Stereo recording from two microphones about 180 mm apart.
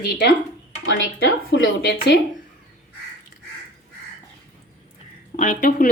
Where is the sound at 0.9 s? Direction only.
90° left.